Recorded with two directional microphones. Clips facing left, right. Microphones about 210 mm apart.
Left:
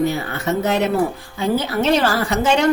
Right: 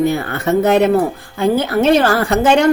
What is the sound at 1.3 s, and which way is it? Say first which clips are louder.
A woman's voice: right 5 dB; 55° right (ahead or behind).